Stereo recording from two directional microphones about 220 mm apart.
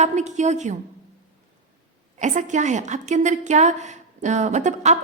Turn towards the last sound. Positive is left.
turn(degrees=-30)  # may be behind; listen again after turning